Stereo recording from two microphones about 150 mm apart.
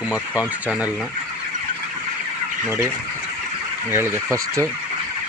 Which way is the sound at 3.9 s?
15° right (ahead or behind).